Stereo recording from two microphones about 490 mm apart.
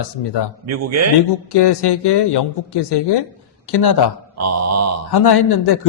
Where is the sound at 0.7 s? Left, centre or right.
Right.